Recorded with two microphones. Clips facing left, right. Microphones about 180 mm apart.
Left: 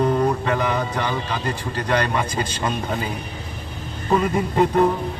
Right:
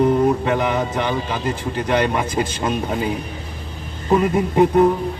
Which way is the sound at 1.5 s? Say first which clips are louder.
Right 3 dB; 10° right (ahead or behind).